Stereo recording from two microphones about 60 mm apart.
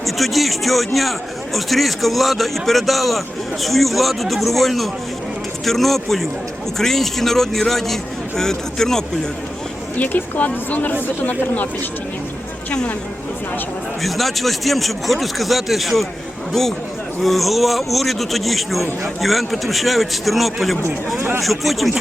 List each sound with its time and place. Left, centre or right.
0.0 s a man's voice: centre
10.0 s speech: left
14.0 s a man's voice: centre
21.2 s speech: right
21.4 s a man's voice: centre